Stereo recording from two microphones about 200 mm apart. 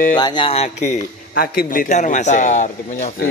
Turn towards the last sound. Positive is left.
turn(degrees=40)  # may be behind; listen again after turning